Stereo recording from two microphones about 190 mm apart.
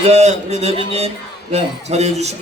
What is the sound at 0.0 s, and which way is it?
A man's voice, 35° right (ahead or behind).